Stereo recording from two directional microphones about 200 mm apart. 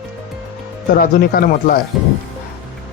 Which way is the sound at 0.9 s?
45° left (ahead or behind).